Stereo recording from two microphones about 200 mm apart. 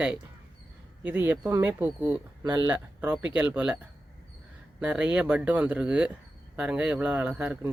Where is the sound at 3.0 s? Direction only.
10° right (ahead or behind).